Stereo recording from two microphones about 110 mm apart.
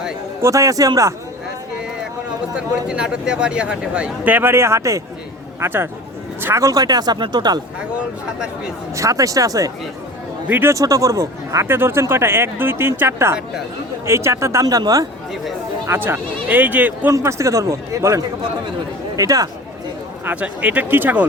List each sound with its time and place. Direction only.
0.4 s speech: 30° right (ahead or behind)
2.6 s speech: 10° right (ahead or behind); by 7.6 s 40° right (ahead or behind)
7.8 s speech: 10° right (ahead or behind)
9.0 s speech: 30° right (ahead or behind)
15.9 s speech: 20° right (ahead or behind)
17.1 s speech: 25° right (ahead or behind)
20.2 s speech: 15° right (ahead or behind)